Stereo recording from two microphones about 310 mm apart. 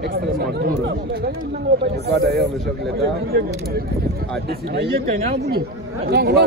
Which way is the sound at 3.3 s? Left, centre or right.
Right.